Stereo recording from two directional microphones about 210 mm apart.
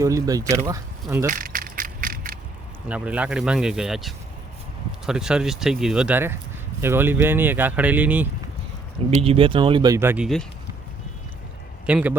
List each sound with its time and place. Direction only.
0.0 s speech: 15° right (ahead or behind)
1.3 s a sound: 40° right (ahead or behind)
2.9 s speech: 5° right (ahead or behind)
9.0 s speech: 30° right (ahead or behind); by 10.2 s 10° right (ahead or behind)
11.9 s speech: 5° right (ahead or behind)